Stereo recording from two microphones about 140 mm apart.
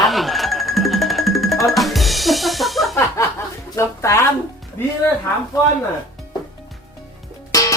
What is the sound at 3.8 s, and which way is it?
Speech, 20° left (ahead or behind).